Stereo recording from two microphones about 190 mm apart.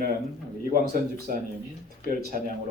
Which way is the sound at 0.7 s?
50° right (ahead or behind).